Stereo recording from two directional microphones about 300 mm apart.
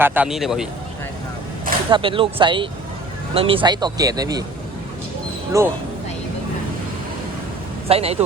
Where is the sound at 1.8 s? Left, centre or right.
Centre.